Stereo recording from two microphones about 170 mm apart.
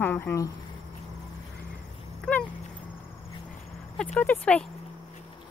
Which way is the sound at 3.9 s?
10° left (ahead or behind).